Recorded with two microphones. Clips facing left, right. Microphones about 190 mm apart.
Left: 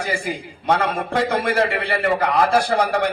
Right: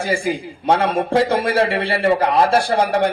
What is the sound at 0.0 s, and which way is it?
A man's voice, 25° right (ahead or behind).